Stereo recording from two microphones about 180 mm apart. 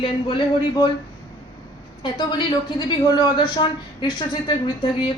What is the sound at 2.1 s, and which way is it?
Speech, 25° left (ahead or behind).